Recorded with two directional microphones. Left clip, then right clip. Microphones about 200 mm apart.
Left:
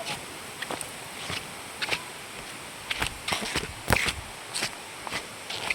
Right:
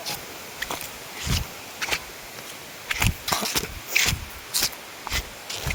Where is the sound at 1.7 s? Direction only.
50° right (ahead or behind).